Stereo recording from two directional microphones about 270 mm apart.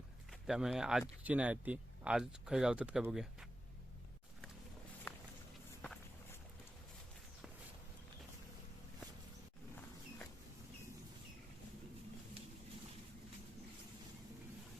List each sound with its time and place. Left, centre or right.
0.3 s speech: centre